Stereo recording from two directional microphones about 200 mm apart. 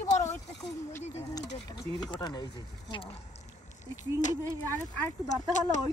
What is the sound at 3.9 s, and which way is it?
Speech, 35° left (ahead or behind).